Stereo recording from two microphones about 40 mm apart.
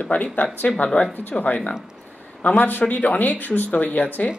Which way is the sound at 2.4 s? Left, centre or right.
Left.